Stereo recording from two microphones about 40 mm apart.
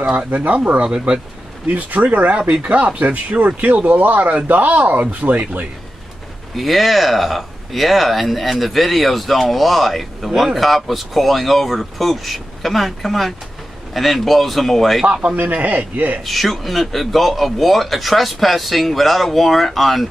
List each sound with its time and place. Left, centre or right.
0.3 s a man's voice: right
0.8 s speech: right
1.7 s a man's voice: right
6.5 s speech: centre
15.5 s a man's voice: right
16.3 s speech: centre